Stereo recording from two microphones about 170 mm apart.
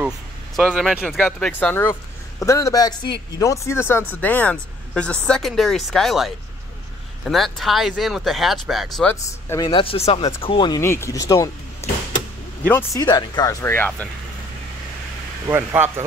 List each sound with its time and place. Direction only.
0.6 s speech: 5° right (ahead or behind)
9.1 s speech: 15° left (ahead or behind)
9.7 s speech: 30° left (ahead or behind)
10.8 s speech: 15° left (ahead or behind)
12.6 s speech: 15° left (ahead or behind)
13.0 s speech: 25° left (ahead or behind)
15.4 s speech: 15° right (ahead or behind)